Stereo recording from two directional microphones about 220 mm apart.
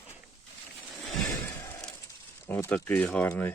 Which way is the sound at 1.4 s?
15° left (ahead or behind).